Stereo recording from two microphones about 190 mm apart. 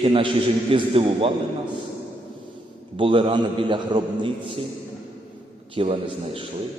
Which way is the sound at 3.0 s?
30° right (ahead or behind).